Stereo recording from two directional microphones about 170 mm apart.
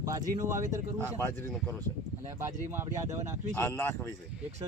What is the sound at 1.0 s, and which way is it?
Speech, 15° left (ahead or behind).